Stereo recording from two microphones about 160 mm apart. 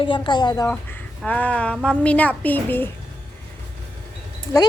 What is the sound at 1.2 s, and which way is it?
A woman's voice, 10° left (ahead or behind).